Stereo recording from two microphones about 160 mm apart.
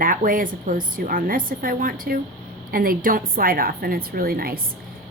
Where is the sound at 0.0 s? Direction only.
60° right (ahead or behind).